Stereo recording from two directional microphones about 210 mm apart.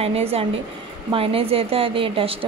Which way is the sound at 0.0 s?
30° right (ahead or behind).